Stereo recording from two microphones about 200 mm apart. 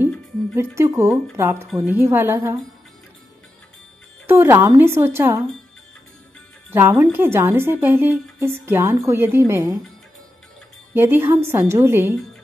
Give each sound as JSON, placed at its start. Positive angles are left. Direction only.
{"t": 0.6, "sound": "a woman's voice", "side_deg": -15}
{"t": 4.3, "sound": "a woman's voice", "side_deg": -10}
{"t": 6.7, "sound": "a woman's voice", "side_deg": -10}
{"t": 11.0, "sound": "a woman's voice", "side_deg": -10}